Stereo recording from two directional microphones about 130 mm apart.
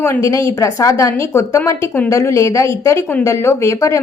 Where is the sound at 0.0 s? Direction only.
20° left (ahead or behind).